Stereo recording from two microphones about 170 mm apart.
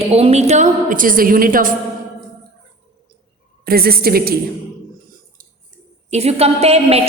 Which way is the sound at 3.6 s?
65° right (ahead or behind).